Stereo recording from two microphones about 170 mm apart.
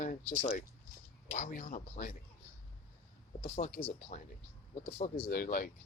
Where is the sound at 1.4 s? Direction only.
55° left (ahead or behind).